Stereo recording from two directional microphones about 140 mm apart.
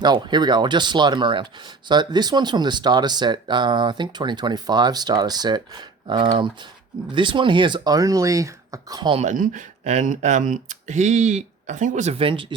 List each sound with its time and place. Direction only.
0.0 s speech: 30° right (ahead or behind)
9.1 s speech: 65° right (ahead or behind)
12.1 s speech: 40° right (ahead or behind)